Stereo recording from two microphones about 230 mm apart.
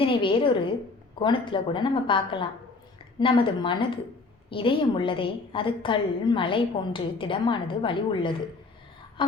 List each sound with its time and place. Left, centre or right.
0.0 s a woman's voice: left